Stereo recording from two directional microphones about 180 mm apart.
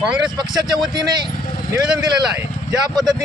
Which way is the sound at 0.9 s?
25° right (ahead or behind).